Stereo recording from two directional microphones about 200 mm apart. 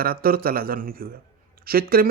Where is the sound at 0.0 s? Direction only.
45° right (ahead or behind).